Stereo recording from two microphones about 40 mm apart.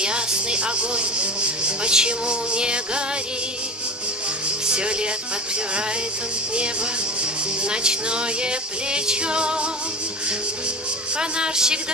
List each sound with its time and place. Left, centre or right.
0.0 s speech: right
4.6 s music: right
7.7 s speech: right
11.1 s speech: right